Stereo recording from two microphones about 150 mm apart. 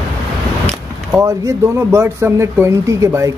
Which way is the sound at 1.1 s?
20° right (ahead or behind).